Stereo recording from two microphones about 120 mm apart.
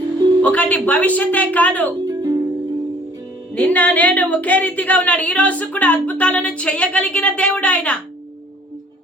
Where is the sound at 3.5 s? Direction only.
10° left (ahead or behind).